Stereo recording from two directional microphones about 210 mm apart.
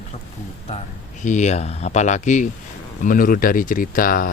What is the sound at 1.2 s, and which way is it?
Speech, 35° left (ahead or behind).